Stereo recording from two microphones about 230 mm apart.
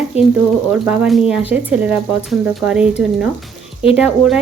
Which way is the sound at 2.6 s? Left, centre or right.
Centre.